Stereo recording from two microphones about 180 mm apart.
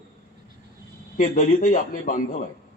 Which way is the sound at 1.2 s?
50° left (ahead or behind).